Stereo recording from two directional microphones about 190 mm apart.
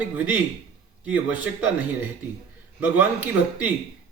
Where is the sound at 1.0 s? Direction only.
10° right (ahead or behind).